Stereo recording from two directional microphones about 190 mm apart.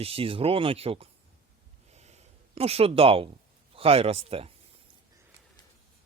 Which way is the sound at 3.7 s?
30° right (ahead or behind).